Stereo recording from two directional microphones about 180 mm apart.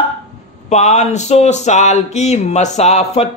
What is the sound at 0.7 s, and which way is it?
Speech, 40° left (ahead or behind).